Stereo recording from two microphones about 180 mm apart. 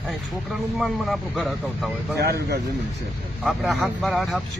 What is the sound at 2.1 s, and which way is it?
Speech, 60° right (ahead or behind).